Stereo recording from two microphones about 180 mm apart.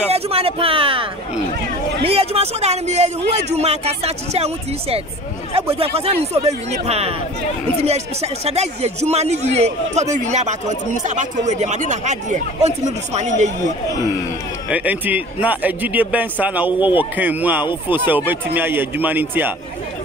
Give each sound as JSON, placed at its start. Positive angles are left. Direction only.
{"t": 0.1, "sound": "speech", "side_deg": -35}
{"t": 2.0, "sound": "speech", "side_deg": -35}
{"t": 14.7, "sound": "a man's voice", "side_deg": -10}